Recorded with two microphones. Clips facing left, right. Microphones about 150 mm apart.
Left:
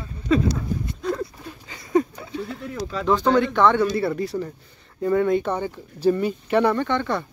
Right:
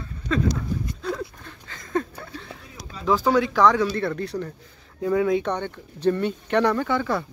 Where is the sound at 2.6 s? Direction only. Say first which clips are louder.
Left 12 dB; 90° left.